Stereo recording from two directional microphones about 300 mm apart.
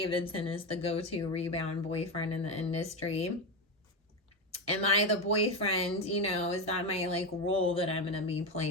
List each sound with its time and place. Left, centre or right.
0.0 s speech: centre
4.5 s speech: centre